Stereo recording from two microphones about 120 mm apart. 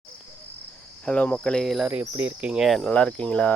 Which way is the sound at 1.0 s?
10° left (ahead or behind).